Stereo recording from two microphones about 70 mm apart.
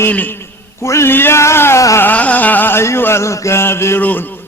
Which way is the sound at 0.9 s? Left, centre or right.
Left.